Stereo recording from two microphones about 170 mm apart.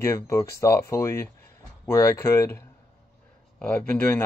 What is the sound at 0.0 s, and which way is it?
Speech, 15° left (ahead or behind).